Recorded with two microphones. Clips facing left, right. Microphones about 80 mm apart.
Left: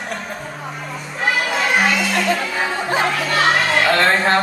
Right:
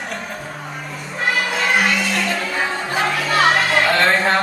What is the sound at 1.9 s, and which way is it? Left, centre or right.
Music, centre.